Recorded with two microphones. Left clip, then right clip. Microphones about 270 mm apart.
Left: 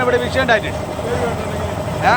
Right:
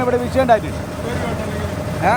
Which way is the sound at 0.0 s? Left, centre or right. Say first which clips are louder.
Left 1 dB; right.